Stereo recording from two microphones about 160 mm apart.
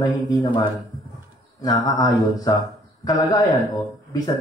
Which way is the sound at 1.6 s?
25° left (ahead or behind).